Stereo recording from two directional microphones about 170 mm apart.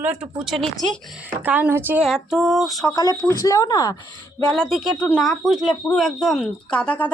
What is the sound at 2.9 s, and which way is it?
Speech, 20° left (ahead or behind).